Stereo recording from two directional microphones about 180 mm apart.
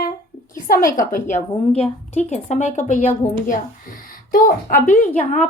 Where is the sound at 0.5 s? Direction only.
50° left (ahead or behind).